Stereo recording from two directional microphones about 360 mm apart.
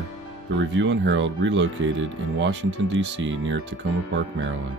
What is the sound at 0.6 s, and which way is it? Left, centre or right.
Speech, right.